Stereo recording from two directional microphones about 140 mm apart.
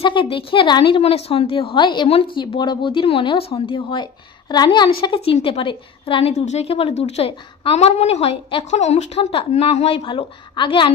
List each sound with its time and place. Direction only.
0.0 s a woman's voice: 35° left (ahead or behind)